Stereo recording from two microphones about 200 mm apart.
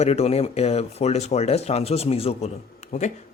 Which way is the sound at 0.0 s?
30° left (ahead or behind).